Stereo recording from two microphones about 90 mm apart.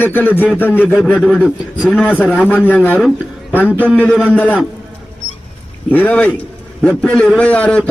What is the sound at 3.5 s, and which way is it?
A man's voice, 15° left (ahead or behind).